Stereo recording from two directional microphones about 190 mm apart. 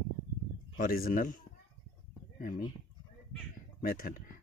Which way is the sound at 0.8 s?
50° left (ahead or behind).